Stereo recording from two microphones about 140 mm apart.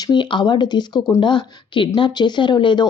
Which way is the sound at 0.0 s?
35° left (ahead or behind).